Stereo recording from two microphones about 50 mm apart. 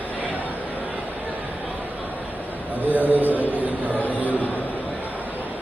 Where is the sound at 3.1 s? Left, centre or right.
Right.